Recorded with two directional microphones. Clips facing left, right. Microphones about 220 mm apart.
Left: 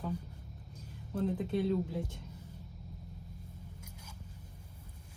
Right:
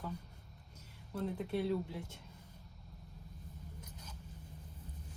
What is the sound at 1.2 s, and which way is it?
Speech, 20° left (ahead or behind).